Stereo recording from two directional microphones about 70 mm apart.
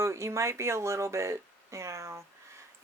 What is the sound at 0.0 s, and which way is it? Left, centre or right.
Speech, right.